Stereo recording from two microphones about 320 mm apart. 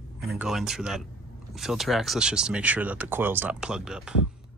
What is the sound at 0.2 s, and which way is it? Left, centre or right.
Speech, centre.